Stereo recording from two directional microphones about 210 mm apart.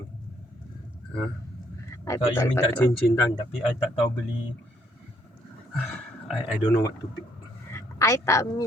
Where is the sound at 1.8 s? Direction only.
15° left (ahead or behind).